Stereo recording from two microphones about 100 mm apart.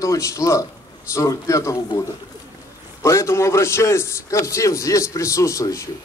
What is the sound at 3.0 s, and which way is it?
A man's voice, 30° left (ahead or behind).